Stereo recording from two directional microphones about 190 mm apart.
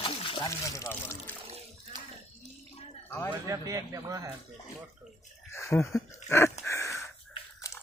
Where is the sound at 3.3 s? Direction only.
15° right (ahead or behind).